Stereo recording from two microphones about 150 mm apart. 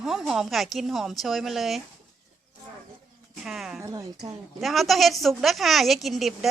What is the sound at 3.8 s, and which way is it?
Speech, 20° right (ahead or behind).